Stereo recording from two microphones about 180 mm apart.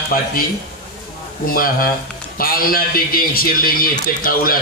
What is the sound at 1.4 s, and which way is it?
A man's voice, 55° left (ahead or behind).